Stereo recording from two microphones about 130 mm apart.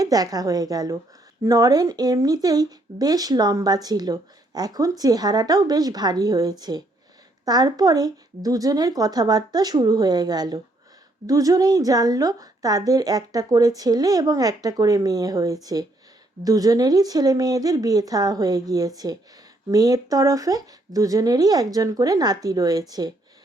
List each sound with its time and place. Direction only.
0.0 s speech: 30° right (ahead or behind)